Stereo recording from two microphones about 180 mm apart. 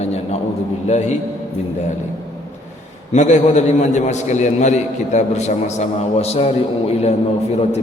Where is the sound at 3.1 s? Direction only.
40° left (ahead or behind).